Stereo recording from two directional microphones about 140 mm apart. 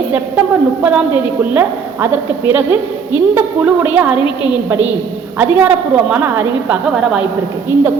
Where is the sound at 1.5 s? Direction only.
15° right (ahead or behind).